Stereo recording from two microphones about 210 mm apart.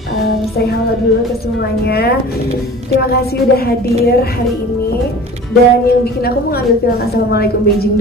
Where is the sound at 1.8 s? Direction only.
50° left (ahead or behind).